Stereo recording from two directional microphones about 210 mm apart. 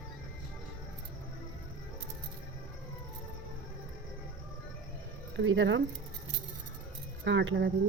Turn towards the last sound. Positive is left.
turn(degrees=-60)  # may be behind; listen again after turning